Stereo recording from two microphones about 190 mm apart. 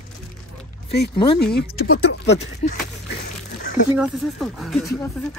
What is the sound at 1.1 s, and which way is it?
Speech, 25° left (ahead or behind).